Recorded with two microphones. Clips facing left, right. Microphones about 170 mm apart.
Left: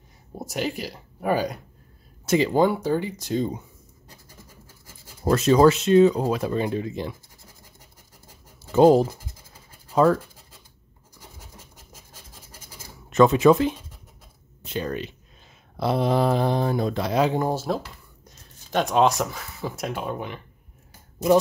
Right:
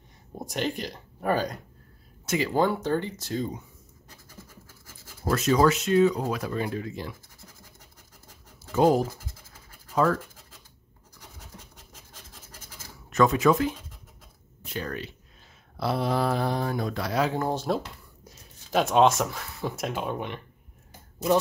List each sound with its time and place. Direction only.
0.3 s speech: 5° left (ahead or behind)
2.2 s speech: 25° left (ahead or behind)
2.5 s speech: 15° left (ahead or behind)
5.3 s speech: 30° left (ahead or behind)
8.7 s speech: 30° left (ahead or behind)
11.3 s scratch: 10° left (ahead or behind)
13.1 s speech: 25° left (ahead or behind)
17.6 s speech: centre (ahead or behind)